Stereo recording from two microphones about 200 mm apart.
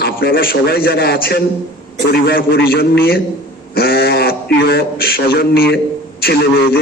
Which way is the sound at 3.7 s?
50° left (ahead or behind).